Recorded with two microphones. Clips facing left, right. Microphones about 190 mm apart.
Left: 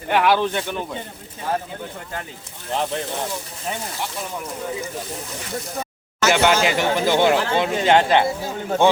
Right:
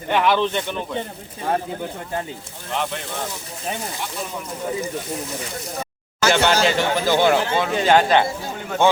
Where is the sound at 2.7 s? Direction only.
35° left (ahead or behind).